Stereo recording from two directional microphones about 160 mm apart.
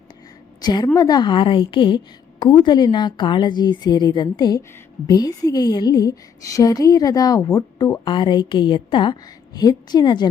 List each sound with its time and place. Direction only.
0.6 s a woman's voice: 25° left (ahead or behind)